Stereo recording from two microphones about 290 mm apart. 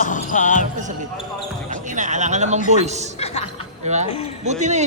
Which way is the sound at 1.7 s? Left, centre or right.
Right.